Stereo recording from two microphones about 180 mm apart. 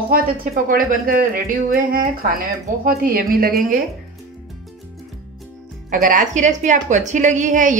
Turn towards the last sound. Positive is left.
turn(degrees=-45)  # may be behind; listen again after turning